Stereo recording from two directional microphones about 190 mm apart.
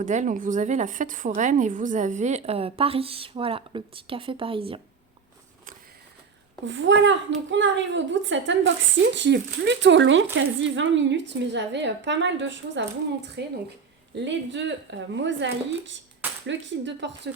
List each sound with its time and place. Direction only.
0.0 s a woman's voice: 40° right (ahead or behind)
6.7 s a woman's voice: 75° right (ahead or behind)
9.1 s a woman's voice: 65° right (ahead or behind)